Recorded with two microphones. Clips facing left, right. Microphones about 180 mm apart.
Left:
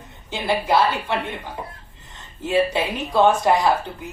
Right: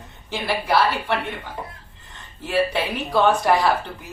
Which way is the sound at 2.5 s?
20° left (ahead or behind).